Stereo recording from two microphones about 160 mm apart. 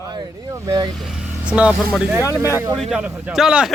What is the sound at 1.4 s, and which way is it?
Speech, 10° right (ahead or behind).